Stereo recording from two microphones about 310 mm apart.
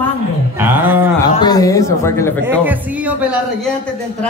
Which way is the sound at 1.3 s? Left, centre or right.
Centre.